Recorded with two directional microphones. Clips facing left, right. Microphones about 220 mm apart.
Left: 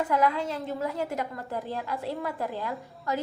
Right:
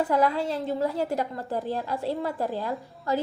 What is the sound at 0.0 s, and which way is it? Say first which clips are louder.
A woman's voice: right 2 dB; 35° right (ahead or behind).